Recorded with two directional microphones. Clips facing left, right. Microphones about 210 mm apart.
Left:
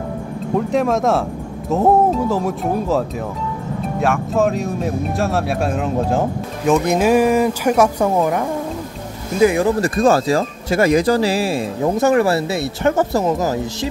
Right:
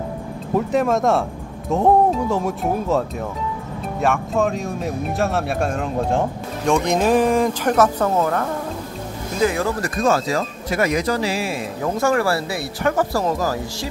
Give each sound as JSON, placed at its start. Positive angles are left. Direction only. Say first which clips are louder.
{"t": 0.6, "sound": "speech", "louder": "left 1 dB", "side_deg": 0}
{"t": 12.0, "sound": "speech", "louder": "left 4 dB", "side_deg": 20}